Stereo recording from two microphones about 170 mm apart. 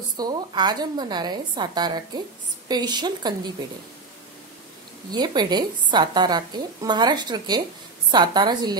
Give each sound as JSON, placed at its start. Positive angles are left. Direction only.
{"t": 0.2, "sound": "a woman's voice", "side_deg": -25}
{"t": 5.1, "sound": "a woman's voice", "side_deg": -25}